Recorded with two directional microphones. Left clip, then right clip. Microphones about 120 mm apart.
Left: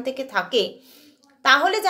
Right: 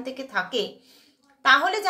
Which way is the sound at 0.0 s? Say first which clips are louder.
Left 4 dB; 30° left (ahead or behind).